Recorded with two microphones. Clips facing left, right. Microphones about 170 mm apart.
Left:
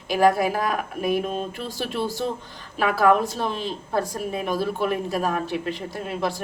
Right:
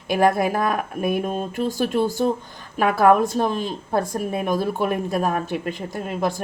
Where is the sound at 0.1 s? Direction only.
50° right (ahead or behind).